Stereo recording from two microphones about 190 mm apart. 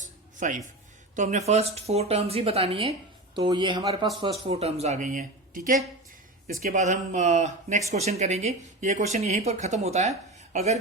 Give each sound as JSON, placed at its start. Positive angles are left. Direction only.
{"t": 0.0, "sound": "music", "side_deg": -40}
{"t": 1.1, "sound": "a woman's voice", "side_deg": -40}